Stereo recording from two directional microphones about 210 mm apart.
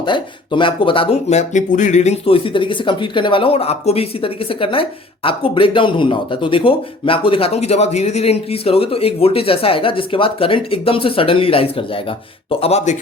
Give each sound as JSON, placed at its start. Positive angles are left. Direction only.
{"t": 0.0, "sound": "speech", "side_deg": 20}